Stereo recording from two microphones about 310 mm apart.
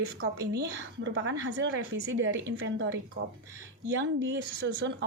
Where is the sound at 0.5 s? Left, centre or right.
Right.